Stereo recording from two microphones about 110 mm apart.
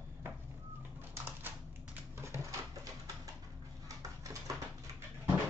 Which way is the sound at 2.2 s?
25° right (ahead or behind).